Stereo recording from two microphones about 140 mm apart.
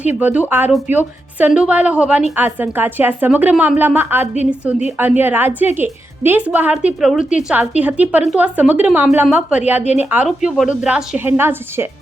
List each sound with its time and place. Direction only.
0.0 s a woman's voice: 10° right (ahead or behind)
9.8 s speech: 55° left (ahead or behind)
10.2 s a woman's voice: 5° right (ahead or behind)